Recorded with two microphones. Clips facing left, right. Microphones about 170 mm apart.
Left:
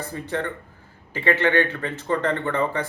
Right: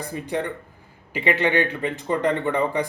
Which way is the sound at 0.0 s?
15° right (ahead or behind).